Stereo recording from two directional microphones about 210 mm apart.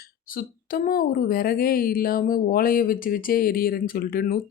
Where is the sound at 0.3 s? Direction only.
45° left (ahead or behind).